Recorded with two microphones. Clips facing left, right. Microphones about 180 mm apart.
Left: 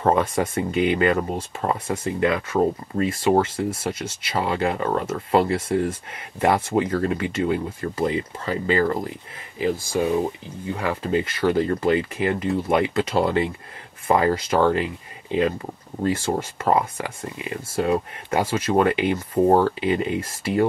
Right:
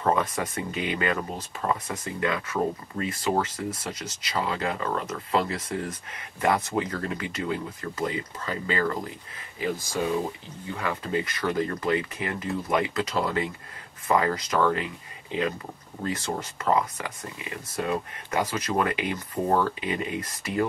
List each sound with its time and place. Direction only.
0.0 s speech: 30° left (ahead or behind)
10.8 s speech: 25° left (ahead or behind)
16.0 s speech: 25° left (ahead or behind)